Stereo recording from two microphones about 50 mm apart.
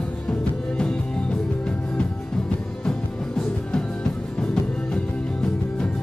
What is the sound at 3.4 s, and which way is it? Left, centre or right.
Music, centre.